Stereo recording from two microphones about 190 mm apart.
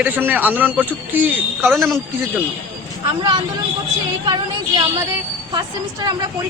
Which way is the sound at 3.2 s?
20° right (ahead or behind).